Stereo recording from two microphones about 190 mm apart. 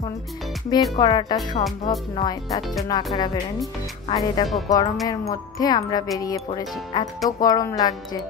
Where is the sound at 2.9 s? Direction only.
20° left (ahead or behind).